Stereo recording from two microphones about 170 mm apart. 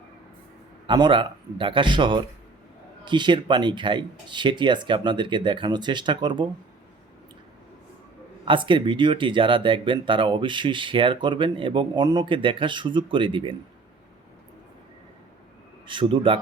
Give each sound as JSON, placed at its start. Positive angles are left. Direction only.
{"t": 0.9, "sound": "speech", "side_deg": -25}
{"t": 8.4, "sound": "speech", "side_deg": -30}
{"t": 15.9, "sound": "speech", "side_deg": -30}